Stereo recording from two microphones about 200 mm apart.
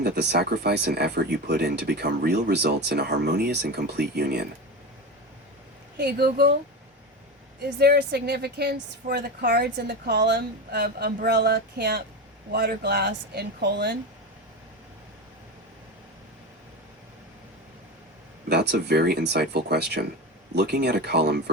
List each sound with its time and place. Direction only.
0.0 s speech: 55° right (ahead or behind)
6.0 s a woman's voice: 55° right (ahead or behind)
7.8 s a woman's voice: 55° right (ahead or behind)
18.4 s speech: 55° right (ahead or behind)